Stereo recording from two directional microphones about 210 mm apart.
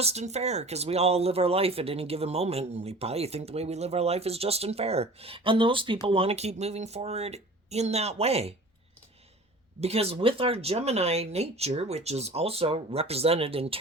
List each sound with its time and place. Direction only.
0.0 s speech: 30° right (ahead or behind)
9.8 s speech: 30° right (ahead or behind)